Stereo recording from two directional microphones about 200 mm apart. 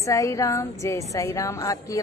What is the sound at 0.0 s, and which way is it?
Speech, 15° left (ahead or behind).